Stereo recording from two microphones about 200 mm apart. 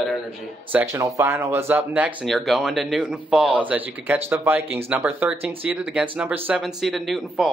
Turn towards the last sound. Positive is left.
turn(degrees=0)  # may be behind; listen again after turning